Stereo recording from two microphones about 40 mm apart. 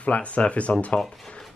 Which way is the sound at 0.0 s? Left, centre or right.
Left.